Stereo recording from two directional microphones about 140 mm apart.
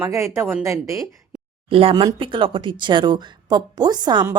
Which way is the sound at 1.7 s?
40° right (ahead or behind).